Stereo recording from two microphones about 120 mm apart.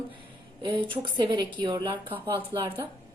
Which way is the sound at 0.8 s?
45° right (ahead or behind).